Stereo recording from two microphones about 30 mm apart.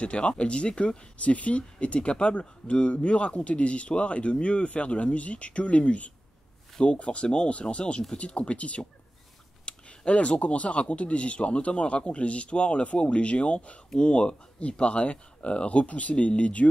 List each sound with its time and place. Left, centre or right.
0.0 s speech: left
1.1 s speech: left
2.0 s speech: left
13.9 s speech: left